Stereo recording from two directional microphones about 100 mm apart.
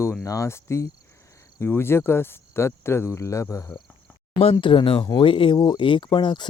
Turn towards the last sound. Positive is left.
turn(degrees=55)  # may be behind; listen again after turning